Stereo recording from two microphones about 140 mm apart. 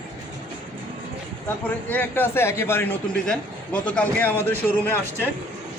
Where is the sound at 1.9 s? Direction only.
15° left (ahead or behind).